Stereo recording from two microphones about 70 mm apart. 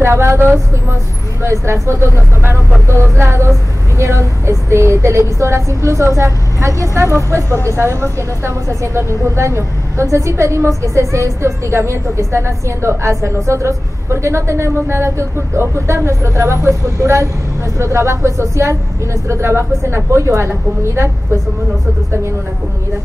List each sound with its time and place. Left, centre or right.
0.0 s a woman's voice: right